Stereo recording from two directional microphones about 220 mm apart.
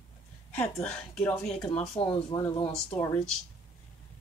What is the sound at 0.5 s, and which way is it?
Speech, 5° left (ahead or behind).